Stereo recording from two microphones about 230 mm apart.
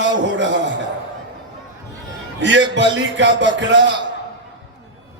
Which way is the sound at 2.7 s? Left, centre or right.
Right.